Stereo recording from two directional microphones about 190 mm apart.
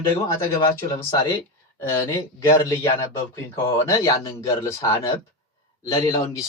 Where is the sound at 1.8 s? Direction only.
10° left (ahead or behind).